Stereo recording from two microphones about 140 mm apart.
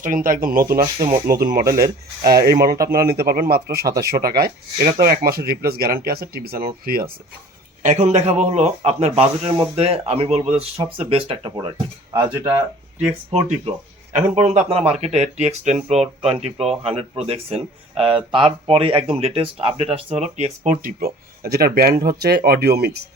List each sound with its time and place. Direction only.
0.0 s speech: 75° right (ahead or behind)
1.3 s speech: 90° right
7.8 s speech: 55° right (ahead or behind); by 11.5 s 40° right (ahead or behind)
12.1 s speech: 15° right (ahead or behind)
13.3 s speech: 50° right (ahead or behind)
20.8 s speech: 90° right